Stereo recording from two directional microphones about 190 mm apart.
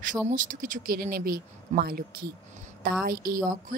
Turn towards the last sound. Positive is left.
turn(degrees=-20)  # may be behind; listen again after turning